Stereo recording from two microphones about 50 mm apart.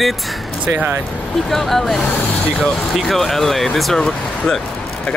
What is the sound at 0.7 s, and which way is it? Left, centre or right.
Speech, right.